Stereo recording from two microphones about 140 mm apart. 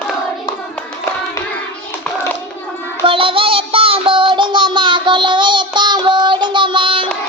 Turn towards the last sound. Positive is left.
turn(degrees=-35)  # may be behind; listen again after turning